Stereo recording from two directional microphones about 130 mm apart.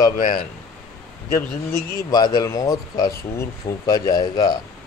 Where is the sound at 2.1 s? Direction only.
30° left (ahead or behind).